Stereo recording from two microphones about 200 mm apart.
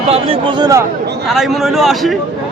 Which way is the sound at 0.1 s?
25° right (ahead or behind).